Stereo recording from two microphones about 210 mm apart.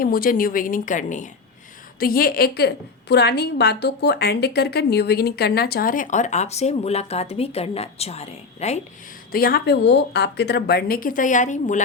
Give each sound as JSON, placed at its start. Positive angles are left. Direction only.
{"t": 0.0, "sound": "a woman's voice", "side_deg": 45}
{"t": 9.3, "sound": "a woman's voice", "side_deg": 45}